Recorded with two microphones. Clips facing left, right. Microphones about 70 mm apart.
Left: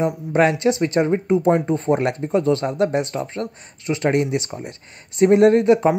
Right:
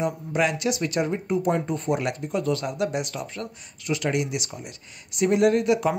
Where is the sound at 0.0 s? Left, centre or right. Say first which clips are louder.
Left 6 dB; left.